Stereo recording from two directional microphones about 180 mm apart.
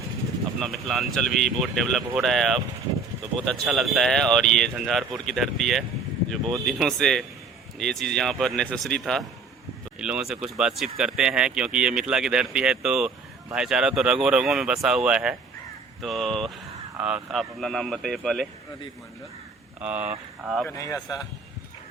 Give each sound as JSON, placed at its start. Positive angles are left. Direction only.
{"t": 0.6, "sound": "speech", "side_deg": 0}
{"t": 19.8, "sound": "speech", "side_deg": -10}
{"t": 20.7, "sound": "speech", "side_deg": 15}